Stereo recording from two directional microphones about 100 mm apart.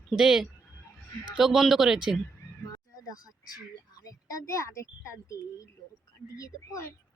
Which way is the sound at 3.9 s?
35° left (ahead or behind).